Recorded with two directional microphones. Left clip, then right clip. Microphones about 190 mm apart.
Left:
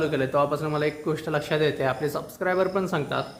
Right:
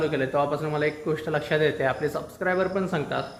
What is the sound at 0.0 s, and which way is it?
Speech, 20° left (ahead or behind).